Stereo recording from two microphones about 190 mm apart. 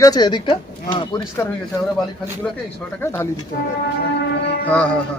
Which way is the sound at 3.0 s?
15° left (ahead or behind).